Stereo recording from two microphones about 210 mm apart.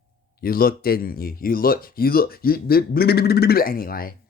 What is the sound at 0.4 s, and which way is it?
Speech, 45° left (ahead or behind).